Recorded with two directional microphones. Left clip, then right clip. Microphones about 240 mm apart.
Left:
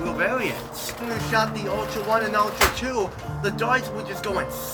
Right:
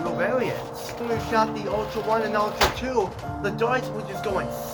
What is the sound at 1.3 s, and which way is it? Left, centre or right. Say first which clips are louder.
Speech: left 1 dB; centre.